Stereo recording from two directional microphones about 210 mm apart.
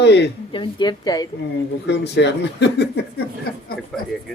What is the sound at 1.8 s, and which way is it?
Speech, 55° left (ahead or behind).